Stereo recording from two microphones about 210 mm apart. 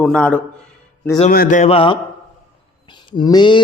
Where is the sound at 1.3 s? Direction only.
40° left (ahead or behind); by 2.0 s 25° left (ahead or behind).